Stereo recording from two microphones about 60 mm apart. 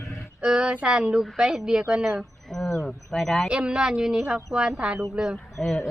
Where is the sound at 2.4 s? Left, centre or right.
Centre.